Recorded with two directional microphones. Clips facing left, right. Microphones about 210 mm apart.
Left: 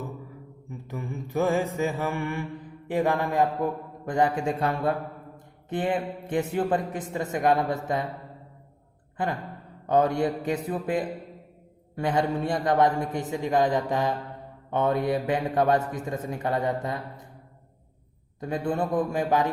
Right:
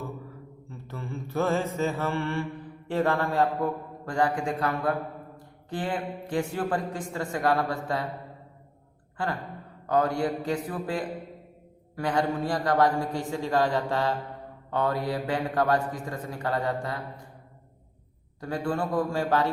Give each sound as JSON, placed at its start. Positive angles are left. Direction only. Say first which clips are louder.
{"t": 0.7, "sound": "mantra", "louder": "left 2 dB", "side_deg": 15}
{"t": 5.6, "sound": "a man's voice", "louder": "left 4 dB", "side_deg": 20}
{"t": 9.2, "sound": "a man's voice", "louder": "left 2 dB", "side_deg": 20}
{"t": 18.3, "sound": "a man's voice", "louder": "left 2 dB", "side_deg": 20}